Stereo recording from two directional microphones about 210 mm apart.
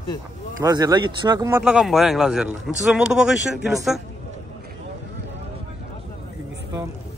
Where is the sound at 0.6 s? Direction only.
15° right (ahead or behind).